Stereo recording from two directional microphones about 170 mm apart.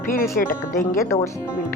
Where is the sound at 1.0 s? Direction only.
15° left (ahead or behind).